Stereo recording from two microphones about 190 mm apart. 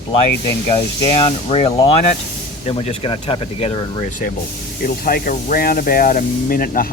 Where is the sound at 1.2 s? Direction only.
30° left (ahead or behind).